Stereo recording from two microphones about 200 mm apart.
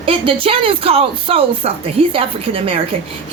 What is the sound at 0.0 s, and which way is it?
A woman's voice, 25° right (ahead or behind).